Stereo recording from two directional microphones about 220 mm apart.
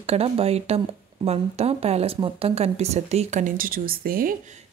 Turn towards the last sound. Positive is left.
turn(degrees=-40)  # may be behind; listen again after turning